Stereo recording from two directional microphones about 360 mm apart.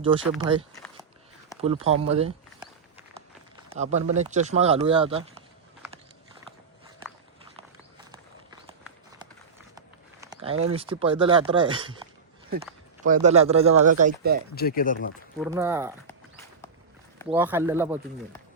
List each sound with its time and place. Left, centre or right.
0.0 s speech: centre
3.7 s speech: centre
9.7 s a sound: centre
10.6 s speech: centre
13.2 s speech: centre
14.5 s speech: left
15.4 s speech: centre
17.2 s speech: centre